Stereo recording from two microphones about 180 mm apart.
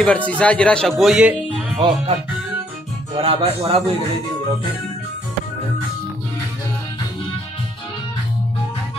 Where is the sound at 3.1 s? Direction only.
30° right (ahead or behind).